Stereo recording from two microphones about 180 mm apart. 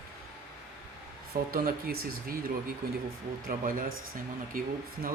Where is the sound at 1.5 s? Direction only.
55° right (ahead or behind).